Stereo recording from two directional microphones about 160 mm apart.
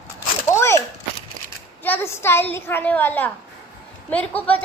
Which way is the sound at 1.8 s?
15° left (ahead or behind).